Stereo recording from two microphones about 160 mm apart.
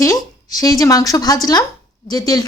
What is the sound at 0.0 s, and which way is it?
A woman's voice, 20° left (ahead or behind).